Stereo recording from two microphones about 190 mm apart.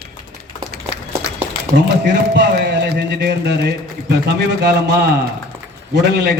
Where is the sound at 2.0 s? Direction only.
65° right (ahead or behind).